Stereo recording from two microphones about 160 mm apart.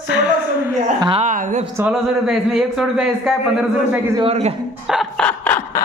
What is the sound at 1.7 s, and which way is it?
Speech, 5° right (ahead or behind).